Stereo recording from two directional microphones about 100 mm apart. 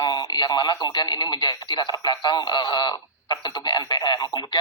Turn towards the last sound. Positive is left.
turn(degrees=45)  # may be behind; listen again after turning